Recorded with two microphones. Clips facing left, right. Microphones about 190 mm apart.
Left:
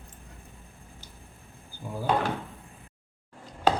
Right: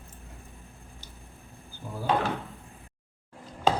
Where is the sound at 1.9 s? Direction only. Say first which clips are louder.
Left 2 dB; 15° left (ahead or behind).